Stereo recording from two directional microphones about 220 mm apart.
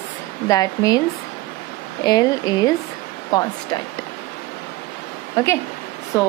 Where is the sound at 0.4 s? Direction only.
15° left (ahead or behind).